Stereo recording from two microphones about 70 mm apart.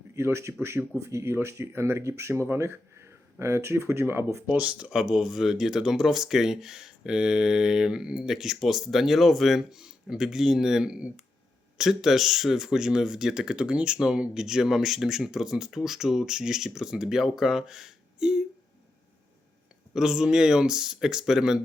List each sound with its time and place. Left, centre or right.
0.2 s speech: right
4.5 s speech: centre
19.9 s speech: centre